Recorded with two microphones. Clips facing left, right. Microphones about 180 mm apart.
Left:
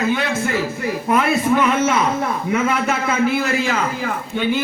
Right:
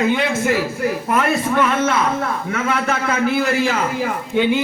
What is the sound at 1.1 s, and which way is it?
A man's voice, 5° left (ahead or behind).